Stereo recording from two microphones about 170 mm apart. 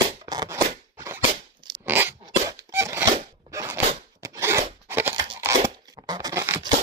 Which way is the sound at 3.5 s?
15° right (ahead or behind).